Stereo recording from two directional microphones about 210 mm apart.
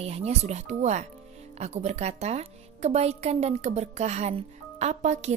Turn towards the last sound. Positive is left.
turn(degrees=-35)  # may be behind; listen again after turning